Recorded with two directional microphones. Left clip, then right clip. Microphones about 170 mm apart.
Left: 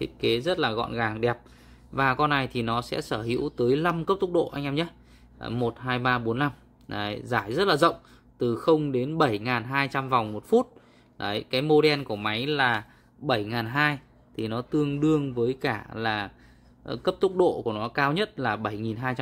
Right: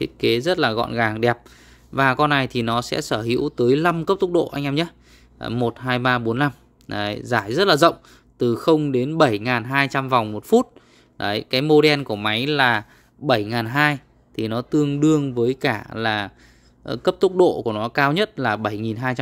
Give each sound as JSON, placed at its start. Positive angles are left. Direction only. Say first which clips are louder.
{"t": 0.0, "sound": "speech", "louder": "right 6 dB", "side_deg": -45}